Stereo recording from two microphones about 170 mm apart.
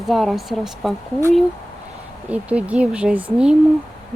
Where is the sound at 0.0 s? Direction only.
Centre (ahead or behind).